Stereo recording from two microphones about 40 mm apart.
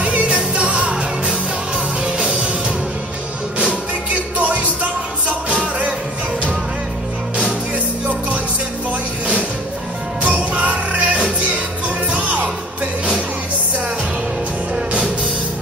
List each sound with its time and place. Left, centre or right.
0.0 s music: right
4.4 s music: right
10.2 s music: right